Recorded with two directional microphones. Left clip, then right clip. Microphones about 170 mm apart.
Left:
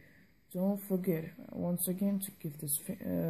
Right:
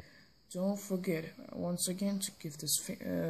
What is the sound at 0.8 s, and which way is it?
Speech, 25° left (ahead or behind).